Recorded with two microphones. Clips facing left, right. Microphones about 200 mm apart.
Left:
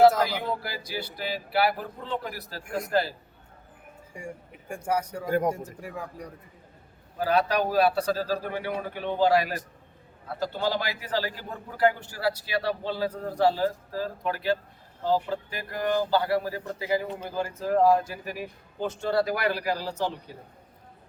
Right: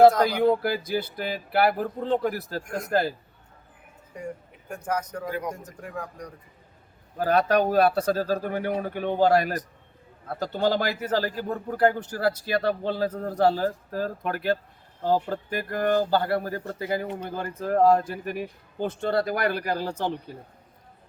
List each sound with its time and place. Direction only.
0.6 s speech: 50° right (ahead or behind)
4.7 s speech: 10° left (ahead or behind)
5.2 s a man's voice: 45° left (ahead or behind)
5.5 s speech: 10° left (ahead or behind)
7.2 s speech: 50° right (ahead or behind)